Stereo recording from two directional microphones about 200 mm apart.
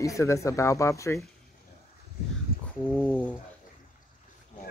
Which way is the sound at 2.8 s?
5° left (ahead or behind).